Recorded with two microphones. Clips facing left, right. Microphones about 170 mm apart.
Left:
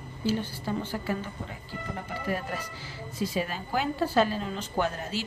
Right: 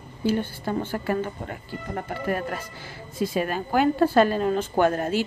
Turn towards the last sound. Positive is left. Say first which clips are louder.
# right 8 dB
turn(degrees=-55)  # may be behind; listen again after turning